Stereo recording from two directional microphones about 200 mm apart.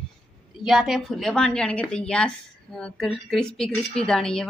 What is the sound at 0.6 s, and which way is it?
A woman's voice, centre (ahead or behind).